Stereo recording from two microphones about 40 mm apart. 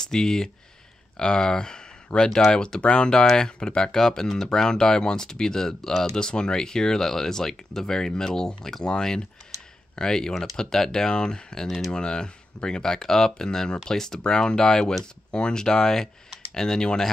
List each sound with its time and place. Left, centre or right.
0.0 s speech: centre